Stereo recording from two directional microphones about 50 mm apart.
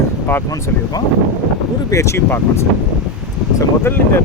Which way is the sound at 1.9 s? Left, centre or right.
Left.